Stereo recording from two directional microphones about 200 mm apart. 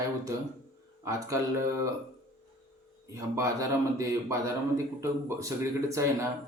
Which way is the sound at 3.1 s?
15° right (ahead or behind).